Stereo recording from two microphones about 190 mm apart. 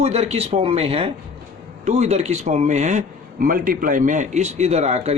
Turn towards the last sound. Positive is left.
turn(degrees=-35)  # may be behind; listen again after turning